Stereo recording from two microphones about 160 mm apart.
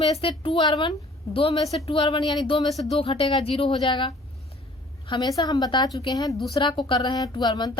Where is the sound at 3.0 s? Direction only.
30° left (ahead or behind).